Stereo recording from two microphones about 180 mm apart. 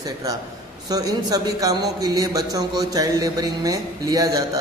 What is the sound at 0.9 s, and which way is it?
A man's voice, 20° right (ahead or behind).